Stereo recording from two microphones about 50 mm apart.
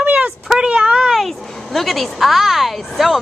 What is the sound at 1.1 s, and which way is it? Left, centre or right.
A woman's voice, centre.